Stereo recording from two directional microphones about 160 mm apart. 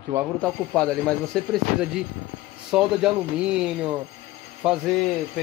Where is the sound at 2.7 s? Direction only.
5° right (ahead or behind).